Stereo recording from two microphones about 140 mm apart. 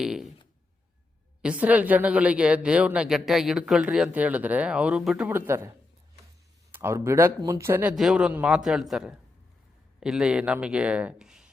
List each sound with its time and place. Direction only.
0.0 s a sound: 5° right (ahead or behind)
1.4 s speech: 10° right (ahead or behind)
5.3 s speech: 20° right (ahead or behind)
6.7 s speech: 20° right (ahead or behind)
7.9 s a man's voice: 5° right (ahead or behind)